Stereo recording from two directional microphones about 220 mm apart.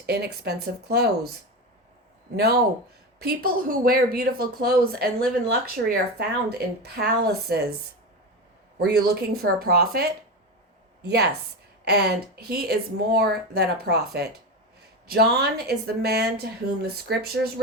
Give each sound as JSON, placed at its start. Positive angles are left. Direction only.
{"t": 0.0, "sound": "speech", "side_deg": -50}
{"t": 8.8, "sound": "speech", "side_deg": -45}
{"t": 15.0, "sound": "speech", "side_deg": -45}